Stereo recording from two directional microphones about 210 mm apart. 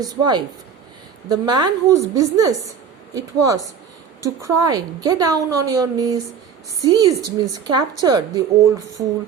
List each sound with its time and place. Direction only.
0.0 s a woman's voice: 20° right (ahead or behind)